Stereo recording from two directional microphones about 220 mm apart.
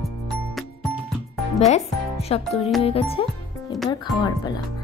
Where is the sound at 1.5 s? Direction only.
30° left (ahead or behind).